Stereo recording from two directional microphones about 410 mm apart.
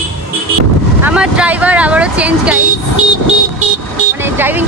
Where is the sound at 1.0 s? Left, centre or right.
Centre.